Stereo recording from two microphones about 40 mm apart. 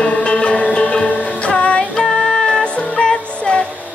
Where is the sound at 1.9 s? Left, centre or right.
Centre.